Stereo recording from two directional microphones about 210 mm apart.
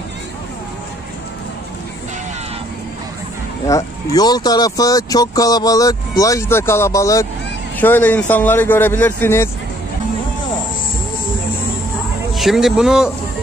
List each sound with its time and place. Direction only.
3.6 s speech: 15° left (ahead or behind)
12.4 s speech: centre (ahead or behind)